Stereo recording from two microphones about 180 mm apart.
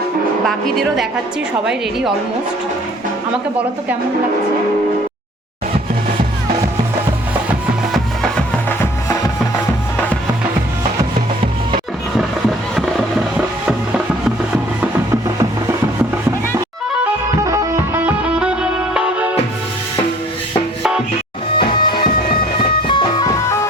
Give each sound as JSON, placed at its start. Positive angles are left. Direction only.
{"t": 0.4, "sound": "speech", "side_deg": 0}
{"t": 7.9, "sound": "music", "side_deg": 5}
{"t": 12.1, "sound": "music", "side_deg": 0}
{"t": 14.3, "sound": "music", "side_deg": -5}
{"t": 17.4, "sound": "music", "side_deg": -15}
{"t": 21.6, "sound": "music", "side_deg": 25}